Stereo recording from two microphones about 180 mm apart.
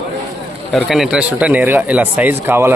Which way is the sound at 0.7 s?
Centre (ahead or behind).